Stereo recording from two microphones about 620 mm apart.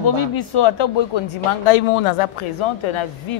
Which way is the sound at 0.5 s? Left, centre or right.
Left.